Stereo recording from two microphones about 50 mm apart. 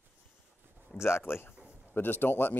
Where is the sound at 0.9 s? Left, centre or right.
Left.